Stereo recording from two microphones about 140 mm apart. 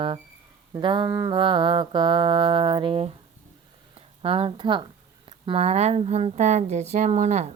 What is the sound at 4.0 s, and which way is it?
A woman's voice, 45° right (ahead or behind).